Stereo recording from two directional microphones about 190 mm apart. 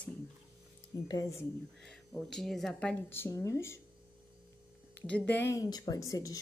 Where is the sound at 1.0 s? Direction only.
20° left (ahead or behind).